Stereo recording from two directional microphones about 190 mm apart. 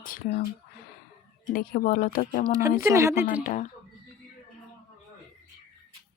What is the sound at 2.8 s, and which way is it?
Speech, 15° right (ahead or behind).